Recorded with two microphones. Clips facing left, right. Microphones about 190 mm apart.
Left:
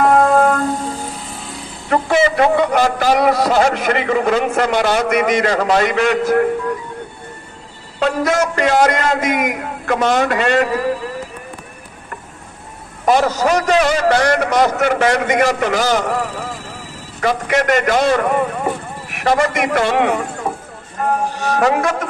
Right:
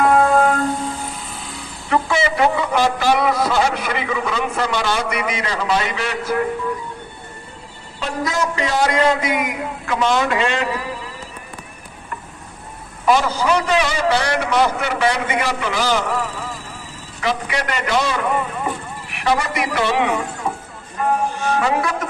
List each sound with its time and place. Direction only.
0.0 s music: 40° left (ahead or behind)
2.0 s a man's voice: 55° left (ahead or behind)
3.8 s a man's voice: 60° left (ahead or behind)
8.0 s a man's voice: 65° left (ahead or behind)
8.8 s a man's voice: 45° left (ahead or behind)
13.0 s a man's voice: 45° left (ahead or behind)
21.3 s a man's voice: 40° left (ahead or behind)